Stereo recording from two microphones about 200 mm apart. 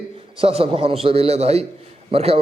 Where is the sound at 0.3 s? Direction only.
30° right (ahead or behind).